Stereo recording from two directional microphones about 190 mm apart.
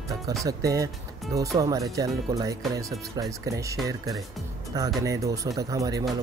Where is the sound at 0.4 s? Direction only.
20° right (ahead or behind).